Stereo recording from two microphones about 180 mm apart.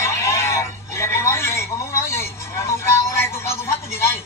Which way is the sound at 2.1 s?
15° left (ahead or behind).